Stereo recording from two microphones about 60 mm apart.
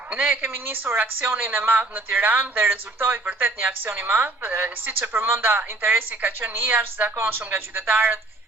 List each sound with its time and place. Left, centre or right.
0.1 s a woman's voice: right